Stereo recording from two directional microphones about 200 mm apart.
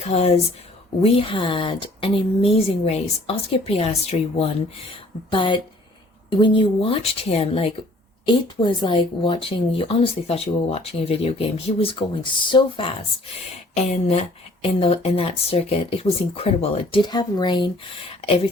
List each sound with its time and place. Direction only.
0.0 s speech: 30° left (ahead or behind)